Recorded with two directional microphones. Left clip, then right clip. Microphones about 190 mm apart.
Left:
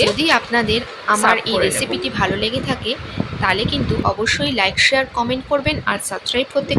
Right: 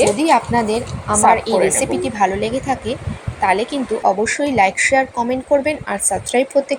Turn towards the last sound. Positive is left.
turn(degrees=-5)  # may be behind; listen again after turning